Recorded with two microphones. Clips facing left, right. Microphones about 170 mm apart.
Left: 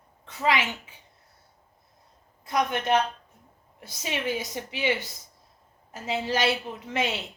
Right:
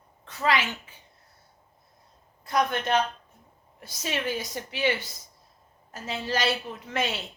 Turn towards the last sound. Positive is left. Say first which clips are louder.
# left 1 dB
turn(degrees=20)  # may be behind; listen again after turning